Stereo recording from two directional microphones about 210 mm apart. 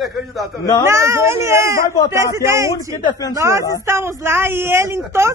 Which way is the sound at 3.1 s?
20° left (ahead or behind).